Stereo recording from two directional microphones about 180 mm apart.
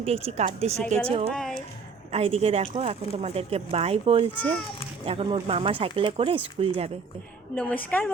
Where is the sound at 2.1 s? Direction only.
35° right (ahead or behind).